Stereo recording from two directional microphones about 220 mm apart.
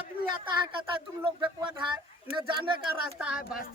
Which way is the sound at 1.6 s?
20° right (ahead or behind).